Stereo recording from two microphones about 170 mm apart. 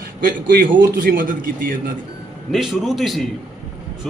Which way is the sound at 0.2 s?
55° right (ahead or behind).